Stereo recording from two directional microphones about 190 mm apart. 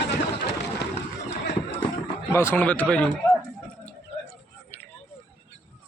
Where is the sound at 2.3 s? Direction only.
10° left (ahead or behind).